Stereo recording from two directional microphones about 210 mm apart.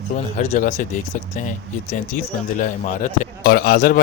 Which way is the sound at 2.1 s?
35° left (ahead or behind).